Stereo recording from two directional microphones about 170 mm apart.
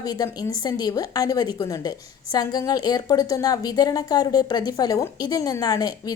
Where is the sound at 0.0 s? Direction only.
20° left (ahead or behind).